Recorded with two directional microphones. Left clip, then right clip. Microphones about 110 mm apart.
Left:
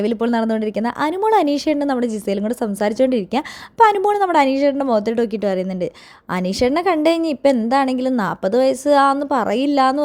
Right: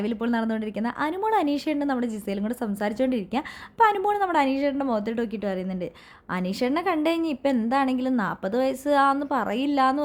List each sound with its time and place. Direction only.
0.0 s speech: 50° left (ahead or behind)